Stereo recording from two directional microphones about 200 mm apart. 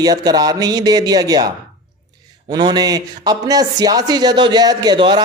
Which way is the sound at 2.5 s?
20° right (ahead or behind).